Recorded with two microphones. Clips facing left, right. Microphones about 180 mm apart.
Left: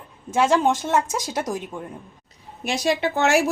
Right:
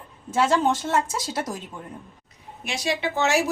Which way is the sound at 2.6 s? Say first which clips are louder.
Left 5 dB; 45° left (ahead or behind).